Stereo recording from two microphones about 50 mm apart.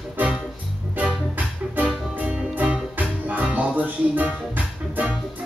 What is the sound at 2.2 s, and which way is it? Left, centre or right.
Music, right.